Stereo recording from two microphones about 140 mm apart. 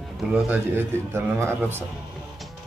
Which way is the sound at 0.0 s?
Centre (ahead or behind).